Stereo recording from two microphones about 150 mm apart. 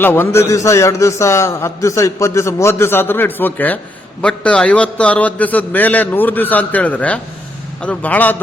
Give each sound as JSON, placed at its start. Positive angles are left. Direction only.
{"t": 0.0, "sound": "a man's voice", "side_deg": 15}